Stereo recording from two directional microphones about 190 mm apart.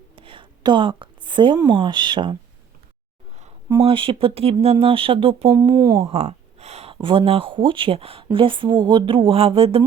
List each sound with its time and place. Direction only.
0.2 s a woman's voice: 25° right (ahead or behind)
3.8 s speech: 25° right (ahead or behind)
5.7 s speech: 20° right (ahead or behind)
6.1 s speech: 35° right (ahead or behind)